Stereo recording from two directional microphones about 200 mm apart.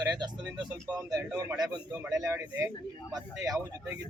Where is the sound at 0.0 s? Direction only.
20° right (ahead or behind).